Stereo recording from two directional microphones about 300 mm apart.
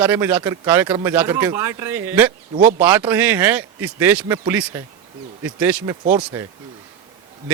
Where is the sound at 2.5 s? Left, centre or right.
Right.